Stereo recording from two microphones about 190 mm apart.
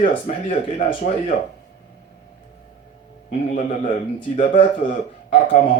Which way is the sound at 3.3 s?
40° left (ahead or behind).